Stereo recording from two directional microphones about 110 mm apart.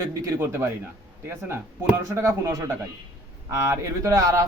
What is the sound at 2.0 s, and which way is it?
Speech, 25° right (ahead or behind).